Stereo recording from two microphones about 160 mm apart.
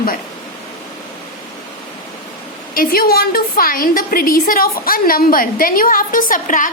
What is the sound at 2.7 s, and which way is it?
A woman's voice, 65° left (ahead or behind).